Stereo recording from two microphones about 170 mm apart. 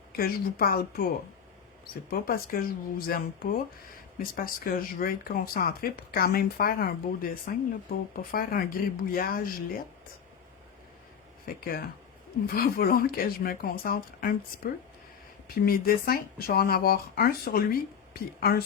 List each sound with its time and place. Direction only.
0.2 s speech: 60° left (ahead or behind)
11.4 s speech: 60° left (ahead or behind)